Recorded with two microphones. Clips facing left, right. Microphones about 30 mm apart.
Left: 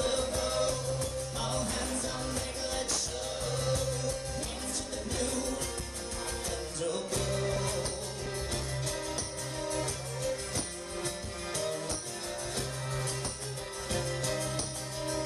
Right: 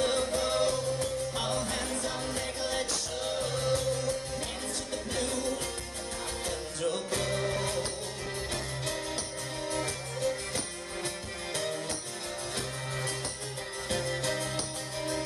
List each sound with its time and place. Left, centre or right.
0.0 s music: right
5.1 s music: right
6.8 s music: right
9.7 s music: right
11.5 s music: right